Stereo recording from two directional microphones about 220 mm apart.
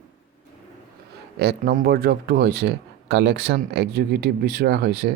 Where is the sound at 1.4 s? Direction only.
45° right (ahead or behind).